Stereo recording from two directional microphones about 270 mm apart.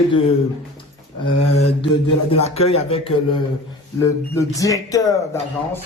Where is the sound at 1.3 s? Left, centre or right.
Left.